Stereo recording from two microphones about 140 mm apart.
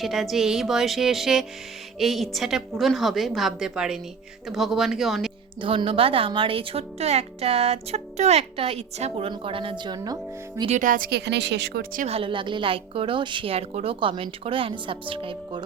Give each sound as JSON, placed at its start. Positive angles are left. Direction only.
{"t": 0.0, "sound": "a woman's voice", "side_deg": 0}
{"t": 5.5, "sound": "a woman's voice", "side_deg": -40}
{"t": 10.7, "sound": "speech", "side_deg": -65}
{"t": 12.0, "sound": "a woman's voice", "side_deg": -40}